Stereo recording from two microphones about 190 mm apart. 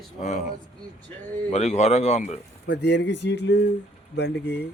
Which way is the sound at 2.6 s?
65° left (ahead or behind).